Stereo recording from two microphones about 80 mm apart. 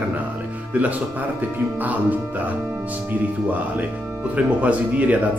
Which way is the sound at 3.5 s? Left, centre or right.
Right.